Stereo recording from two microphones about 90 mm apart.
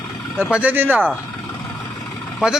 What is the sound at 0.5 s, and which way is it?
Speech, 20° right (ahead or behind).